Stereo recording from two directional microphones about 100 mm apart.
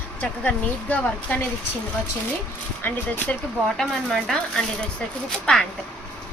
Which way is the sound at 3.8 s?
5° left (ahead or behind).